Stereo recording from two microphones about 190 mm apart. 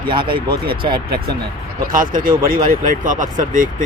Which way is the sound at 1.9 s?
45° right (ahead or behind).